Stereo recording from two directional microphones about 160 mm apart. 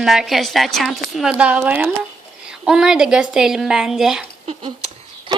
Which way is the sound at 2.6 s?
5° right (ahead or behind).